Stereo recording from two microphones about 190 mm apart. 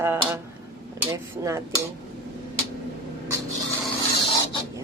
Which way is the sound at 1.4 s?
15° right (ahead or behind).